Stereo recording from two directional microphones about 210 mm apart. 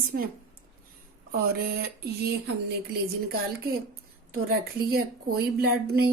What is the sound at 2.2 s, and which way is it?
Speech, 55° right (ahead or behind).